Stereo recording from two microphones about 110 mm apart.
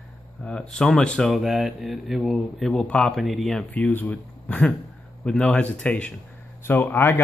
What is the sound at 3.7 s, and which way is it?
Speech, 15° left (ahead or behind).